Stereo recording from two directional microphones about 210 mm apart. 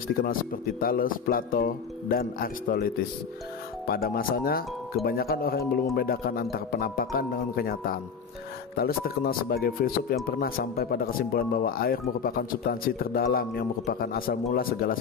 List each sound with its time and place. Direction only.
0.2 s speech: 45° left (ahead or behind)